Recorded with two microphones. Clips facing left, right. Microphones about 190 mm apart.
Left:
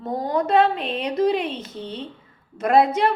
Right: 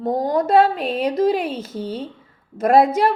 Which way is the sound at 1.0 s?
45° right (ahead or behind).